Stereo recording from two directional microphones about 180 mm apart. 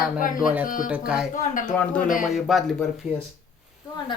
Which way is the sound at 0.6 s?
50° left (ahead or behind).